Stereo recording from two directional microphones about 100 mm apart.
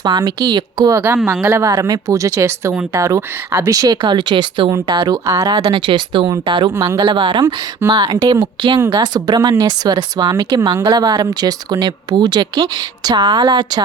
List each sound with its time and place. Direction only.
0.0 s speech: 45° right (ahead or behind); by 3.7 s 25° right (ahead or behind)
3.7 s speech: 35° right (ahead or behind)
4.0 s speech: 50° right (ahead or behind)
6.5 s speech: 45° right (ahead or behind)
7.0 s speech: 60° right (ahead or behind)
7.9 s speech: 40° right (ahead or behind)
8.8 s speech: 35° right (ahead or behind)